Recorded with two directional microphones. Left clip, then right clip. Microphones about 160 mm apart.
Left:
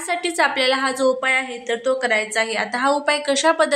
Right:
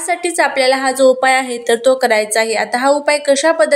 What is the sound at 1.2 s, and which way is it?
A woman's voice, 35° right (ahead or behind).